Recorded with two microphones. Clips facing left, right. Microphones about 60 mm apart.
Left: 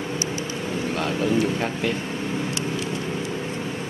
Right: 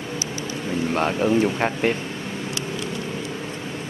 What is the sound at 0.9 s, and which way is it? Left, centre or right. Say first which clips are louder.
Speech: right 3 dB; right.